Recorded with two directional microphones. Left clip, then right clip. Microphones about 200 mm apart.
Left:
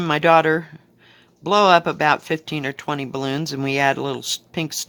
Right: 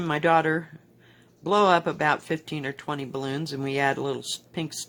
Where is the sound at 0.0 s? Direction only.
30° left (ahead or behind).